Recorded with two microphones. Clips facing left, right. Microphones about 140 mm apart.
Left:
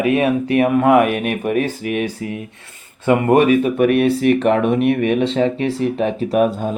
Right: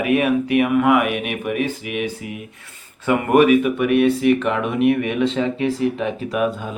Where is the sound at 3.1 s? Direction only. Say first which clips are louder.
Left 1 dB; 25° left (ahead or behind).